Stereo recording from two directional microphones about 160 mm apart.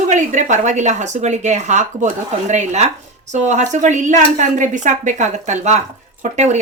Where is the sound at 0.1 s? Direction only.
50° right (ahead or behind).